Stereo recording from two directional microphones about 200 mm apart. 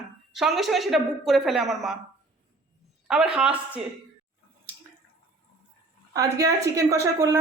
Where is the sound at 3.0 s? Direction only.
5° right (ahead or behind).